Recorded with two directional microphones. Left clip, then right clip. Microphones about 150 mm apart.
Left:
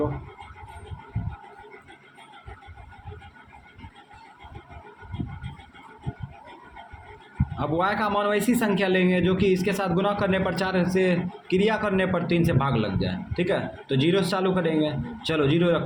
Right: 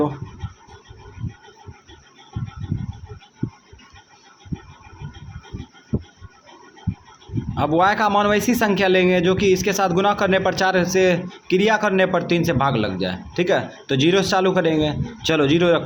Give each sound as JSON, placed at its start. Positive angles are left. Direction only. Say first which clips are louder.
{"t": 7.5, "sound": "speech", "louder": "right 8 dB", "side_deg": -40}